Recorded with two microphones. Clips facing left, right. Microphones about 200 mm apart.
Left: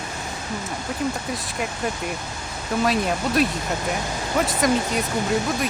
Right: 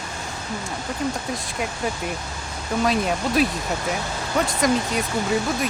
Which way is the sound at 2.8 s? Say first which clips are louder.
Even; centre (ahead or behind).